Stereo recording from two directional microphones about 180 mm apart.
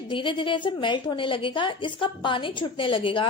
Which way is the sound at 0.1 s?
25° left (ahead or behind).